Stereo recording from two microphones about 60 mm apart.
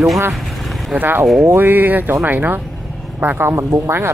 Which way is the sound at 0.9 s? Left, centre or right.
Right.